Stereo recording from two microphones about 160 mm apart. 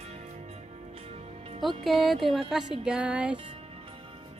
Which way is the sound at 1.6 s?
Centre (ahead or behind).